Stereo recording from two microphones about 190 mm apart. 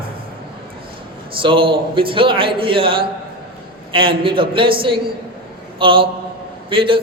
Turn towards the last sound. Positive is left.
turn(degrees=-25)  # may be behind; listen again after turning